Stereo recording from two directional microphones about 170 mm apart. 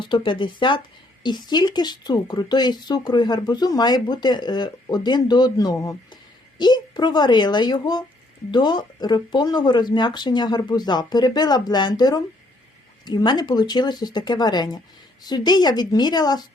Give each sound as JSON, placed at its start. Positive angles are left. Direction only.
{"t": 0.1, "sound": "speech", "side_deg": 30}